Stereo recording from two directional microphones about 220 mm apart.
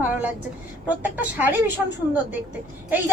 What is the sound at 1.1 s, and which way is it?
Speech, 10° right (ahead or behind).